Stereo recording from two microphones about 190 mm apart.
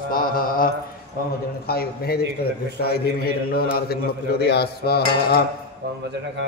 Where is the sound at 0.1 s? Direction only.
50° left (ahead or behind).